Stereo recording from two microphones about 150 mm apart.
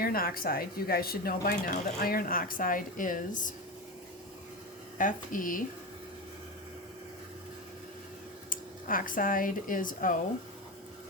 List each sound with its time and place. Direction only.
0.0 s speech: 75° left (ahead or behind); by 3.5 s 60° left (ahead or behind)
4.9 s speech: 60° left (ahead or behind)
8.4 s speech: 65° left (ahead or behind)